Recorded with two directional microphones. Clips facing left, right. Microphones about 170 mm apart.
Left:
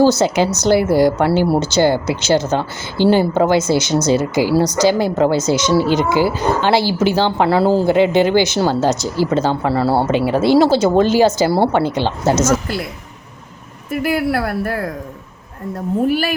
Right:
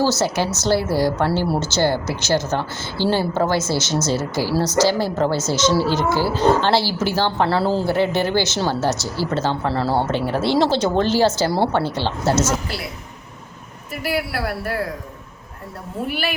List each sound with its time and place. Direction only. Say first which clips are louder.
0.3 s speech: left 5 dB; 15° left (ahead or behind)
0.8 s a woman's voice: left 6 dB; 55° left (ahead or behind)
1.2 s speech: left 5 dB; 15° left (ahead or behind)
14.0 s speech: left 5 dB; 50° left (ahead or behind)
16.0 s speech: left 7 dB; 40° left (ahead or behind)